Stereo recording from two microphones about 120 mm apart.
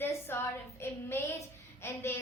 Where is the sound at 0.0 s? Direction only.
20° left (ahead or behind).